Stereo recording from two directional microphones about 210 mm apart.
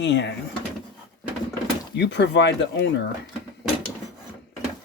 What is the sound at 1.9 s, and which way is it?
Speech, 55° left (ahead or behind).